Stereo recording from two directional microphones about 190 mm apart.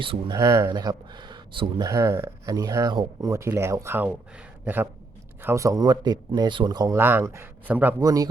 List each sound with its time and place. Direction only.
0.0 s speech: 25° right (ahead or behind)